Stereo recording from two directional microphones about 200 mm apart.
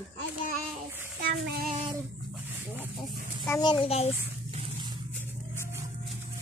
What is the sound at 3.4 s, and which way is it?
Speech, 20° left (ahead or behind).